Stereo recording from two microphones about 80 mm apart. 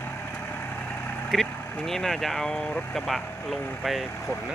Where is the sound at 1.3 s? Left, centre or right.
Centre.